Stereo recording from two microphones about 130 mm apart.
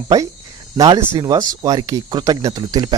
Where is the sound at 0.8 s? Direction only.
25° right (ahead or behind).